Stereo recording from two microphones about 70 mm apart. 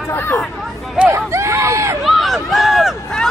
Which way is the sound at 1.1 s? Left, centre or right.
Right.